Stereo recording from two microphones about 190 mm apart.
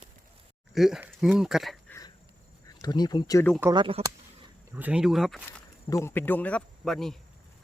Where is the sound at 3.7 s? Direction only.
25° right (ahead or behind).